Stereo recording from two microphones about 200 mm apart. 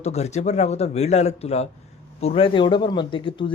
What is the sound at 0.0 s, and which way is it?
A man's voice, 35° left (ahead or behind).